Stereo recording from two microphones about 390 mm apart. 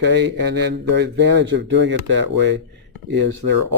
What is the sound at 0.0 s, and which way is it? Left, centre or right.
Speech, right.